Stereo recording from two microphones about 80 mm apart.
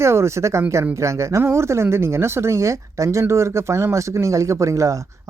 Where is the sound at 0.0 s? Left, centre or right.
Right.